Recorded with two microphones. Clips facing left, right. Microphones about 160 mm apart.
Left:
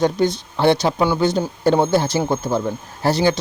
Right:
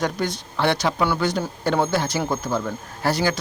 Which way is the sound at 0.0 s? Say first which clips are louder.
Left 7 dB; 25° left (ahead or behind).